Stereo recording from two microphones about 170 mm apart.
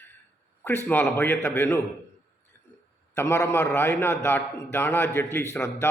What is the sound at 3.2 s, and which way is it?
A man's voice, 15° left (ahead or behind).